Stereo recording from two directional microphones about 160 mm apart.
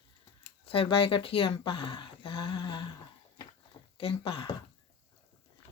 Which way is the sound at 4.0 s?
35° left (ahead or behind).